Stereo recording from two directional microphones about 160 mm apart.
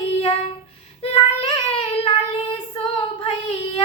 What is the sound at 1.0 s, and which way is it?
Child singing, 35° left (ahead or behind).